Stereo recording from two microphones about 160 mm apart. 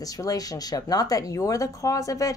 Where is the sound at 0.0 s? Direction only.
20° left (ahead or behind).